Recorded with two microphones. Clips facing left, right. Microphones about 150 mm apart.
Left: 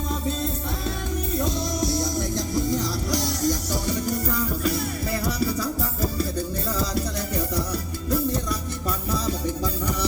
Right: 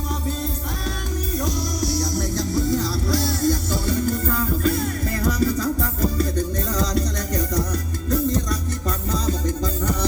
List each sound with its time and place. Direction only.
1.3 s music: 25° left (ahead or behind); by 8.5 s 10° left (ahead or behind)